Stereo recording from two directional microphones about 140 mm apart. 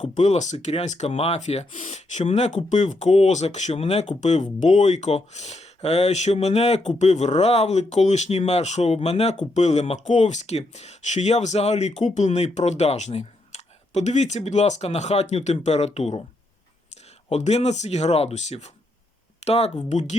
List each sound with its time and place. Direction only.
0.0 s speech: 55° left (ahead or behind)
17.2 s speech: 50° left (ahead or behind)